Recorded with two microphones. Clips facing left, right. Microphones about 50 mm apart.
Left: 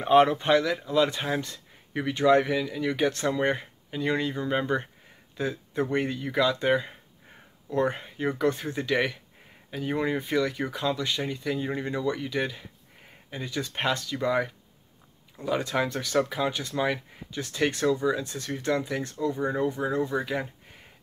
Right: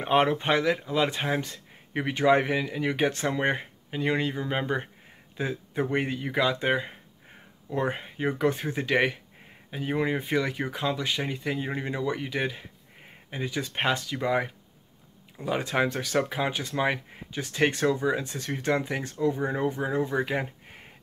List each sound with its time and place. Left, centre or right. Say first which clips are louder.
0.0 s speech: left 3 dB; centre
9.7 s speech: even; centre; by 20.8 s right